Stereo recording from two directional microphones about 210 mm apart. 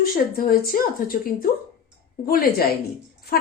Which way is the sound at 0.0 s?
45° left (ahead or behind).